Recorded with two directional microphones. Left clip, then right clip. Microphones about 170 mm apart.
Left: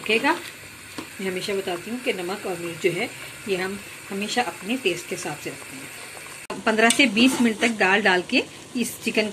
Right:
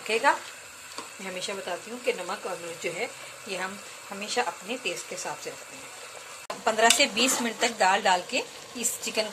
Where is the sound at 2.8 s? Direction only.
5° right (ahead or behind).